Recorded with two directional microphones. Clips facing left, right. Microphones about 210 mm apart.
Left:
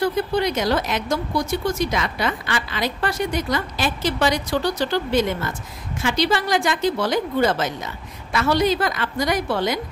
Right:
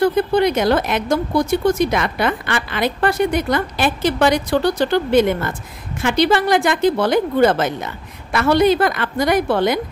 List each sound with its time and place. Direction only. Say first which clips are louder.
0.0 s speech: right 6 dB; 55° right (ahead or behind)